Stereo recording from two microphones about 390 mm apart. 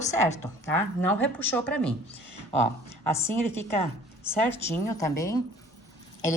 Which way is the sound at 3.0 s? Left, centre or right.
Centre.